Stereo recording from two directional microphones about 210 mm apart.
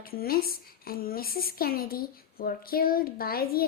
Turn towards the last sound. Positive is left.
turn(degrees=45)  # may be behind; listen again after turning